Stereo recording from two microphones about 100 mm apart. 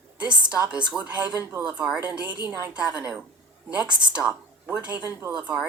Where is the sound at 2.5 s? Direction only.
25° right (ahead or behind).